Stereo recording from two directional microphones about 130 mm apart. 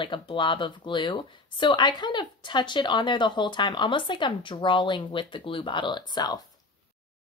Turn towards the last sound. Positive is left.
turn(degrees=30)  # may be behind; listen again after turning